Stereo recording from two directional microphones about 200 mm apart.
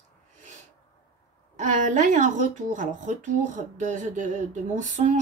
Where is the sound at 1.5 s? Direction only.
40° right (ahead or behind).